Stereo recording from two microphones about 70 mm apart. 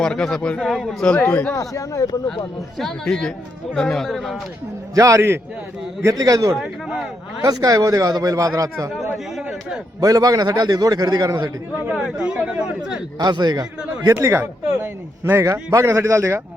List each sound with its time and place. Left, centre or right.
0.0 s speech: centre
1.0 s speech: centre
1.3 s speech: left
1.5 s speech: left
2.7 s speech: centre
4.9 s a man's voice: right
9.1 s speech: centre
10.0 s a man's voice: right
11.9 s speech: centre
13.1 s a man's voice: right
14.1 s a man's voice: right